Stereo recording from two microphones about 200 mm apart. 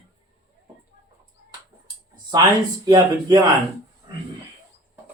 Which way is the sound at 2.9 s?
20° right (ahead or behind).